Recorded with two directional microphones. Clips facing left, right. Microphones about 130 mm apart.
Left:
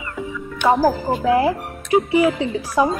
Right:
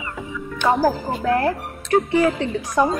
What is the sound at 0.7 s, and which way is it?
Speech, centre (ahead or behind).